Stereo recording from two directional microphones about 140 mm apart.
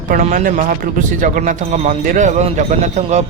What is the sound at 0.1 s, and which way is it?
Speech, 65° right (ahead or behind).